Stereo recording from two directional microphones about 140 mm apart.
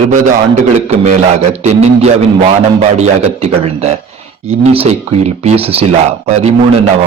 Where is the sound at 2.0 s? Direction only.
50° right (ahead or behind).